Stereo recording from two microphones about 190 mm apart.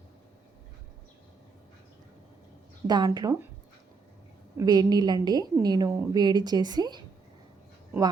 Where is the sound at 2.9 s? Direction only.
20° right (ahead or behind).